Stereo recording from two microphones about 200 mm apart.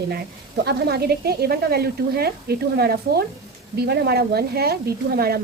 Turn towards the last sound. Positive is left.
turn(degrees=-50)  # may be behind; listen again after turning